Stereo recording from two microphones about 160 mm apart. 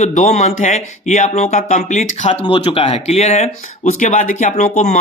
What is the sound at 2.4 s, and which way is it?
Speech, 35° left (ahead or behind).